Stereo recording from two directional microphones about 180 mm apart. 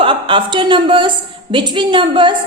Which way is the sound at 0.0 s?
30° right (ahead or behind).